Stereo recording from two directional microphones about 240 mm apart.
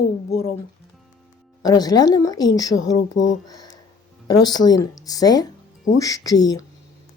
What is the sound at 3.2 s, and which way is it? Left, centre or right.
Speech, left.